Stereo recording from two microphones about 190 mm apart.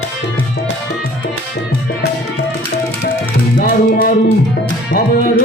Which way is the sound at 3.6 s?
50° left (ahead or behind).